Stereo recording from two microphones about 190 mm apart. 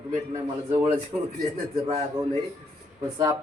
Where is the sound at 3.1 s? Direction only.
15° right (ahead or behind).